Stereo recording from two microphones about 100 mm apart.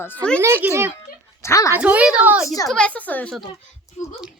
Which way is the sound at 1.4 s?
30° left (ahead or behind).